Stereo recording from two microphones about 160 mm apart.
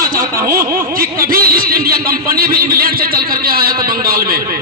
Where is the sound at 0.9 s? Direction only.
65° right (ahead or behind).